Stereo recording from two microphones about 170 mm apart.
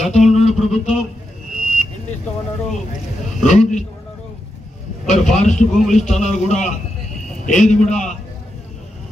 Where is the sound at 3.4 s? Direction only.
45° left (ahead or behind).